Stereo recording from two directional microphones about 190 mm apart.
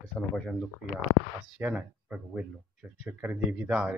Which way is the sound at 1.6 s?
5° right (ahead or behind).